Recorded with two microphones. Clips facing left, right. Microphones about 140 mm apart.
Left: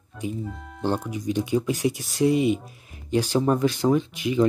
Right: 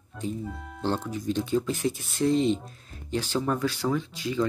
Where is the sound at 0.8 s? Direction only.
15° left (ahead or behind).